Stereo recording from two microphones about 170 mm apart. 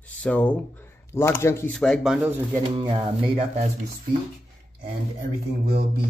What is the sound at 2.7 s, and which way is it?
Speech, 30° right (ahead or behind).